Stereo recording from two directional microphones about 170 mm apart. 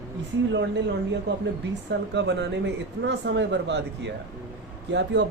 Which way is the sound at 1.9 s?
90° right.